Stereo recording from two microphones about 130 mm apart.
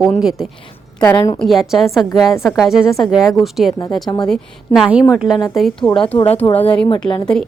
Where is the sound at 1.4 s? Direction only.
Centre (ahead or behind).